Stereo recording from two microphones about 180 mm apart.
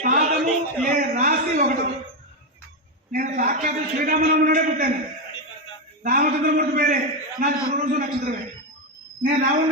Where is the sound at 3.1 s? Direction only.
50° right (ahead or behind).